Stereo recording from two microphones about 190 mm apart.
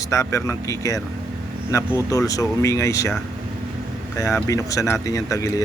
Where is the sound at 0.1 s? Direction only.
15° left (ahead or behind).